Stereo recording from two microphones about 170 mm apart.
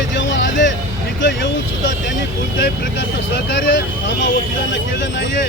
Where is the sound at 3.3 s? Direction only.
90° left.